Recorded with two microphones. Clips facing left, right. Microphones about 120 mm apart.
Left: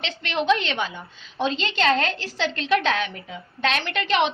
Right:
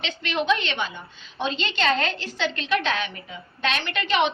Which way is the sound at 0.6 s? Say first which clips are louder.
Left 2 dB; 90° left.